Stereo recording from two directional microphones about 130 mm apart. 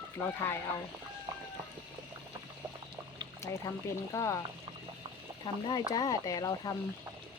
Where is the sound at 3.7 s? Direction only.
25° left (ahead or behind).